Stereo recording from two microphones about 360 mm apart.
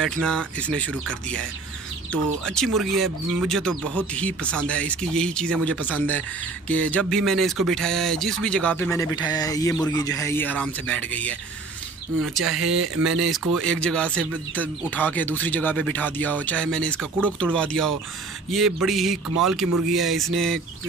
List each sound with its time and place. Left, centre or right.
0.0 s speech: centre
2.4 s speech: centre
12.7 s speech: right
13.7 s speech: centre
19.6 s speech: right
19.9 s speech: centre